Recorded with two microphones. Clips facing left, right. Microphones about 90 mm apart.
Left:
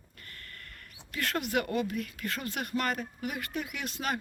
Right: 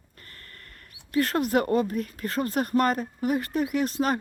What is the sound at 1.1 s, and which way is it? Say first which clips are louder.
Speech: right 8 dB; 35° right (ahead or behind).